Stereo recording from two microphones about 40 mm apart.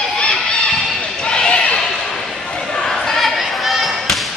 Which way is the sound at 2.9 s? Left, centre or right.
Centre.